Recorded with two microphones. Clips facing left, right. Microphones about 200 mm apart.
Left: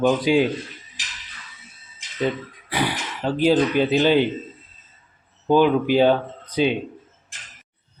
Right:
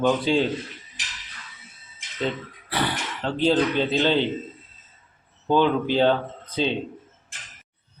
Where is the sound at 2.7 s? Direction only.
10° left (ahead or behind).